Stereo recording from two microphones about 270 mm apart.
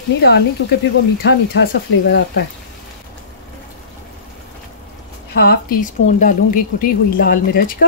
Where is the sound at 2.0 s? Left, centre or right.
Left.